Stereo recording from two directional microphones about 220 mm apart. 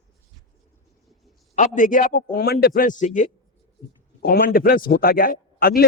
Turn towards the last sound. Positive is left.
turn(degrees=40)  # may be behind; listen again after turning